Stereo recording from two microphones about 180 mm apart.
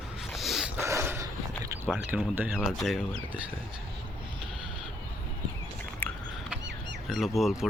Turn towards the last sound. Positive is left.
turn(degrees=0)  # may be behind; listen again after turning